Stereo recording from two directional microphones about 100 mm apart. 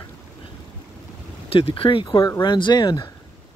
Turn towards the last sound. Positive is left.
turn(degrees=45)  # may be behind; listen again after turning